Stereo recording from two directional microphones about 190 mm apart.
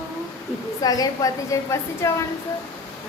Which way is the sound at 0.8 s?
20° left (ahead or behind).